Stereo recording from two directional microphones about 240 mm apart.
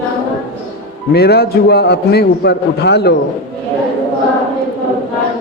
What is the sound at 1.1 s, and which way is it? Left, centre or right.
A man's voice, left.